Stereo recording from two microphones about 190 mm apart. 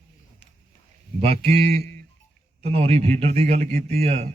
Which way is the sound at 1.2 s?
30° right (ahead or behind).